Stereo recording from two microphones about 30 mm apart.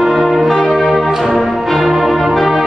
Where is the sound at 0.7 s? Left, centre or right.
Centre.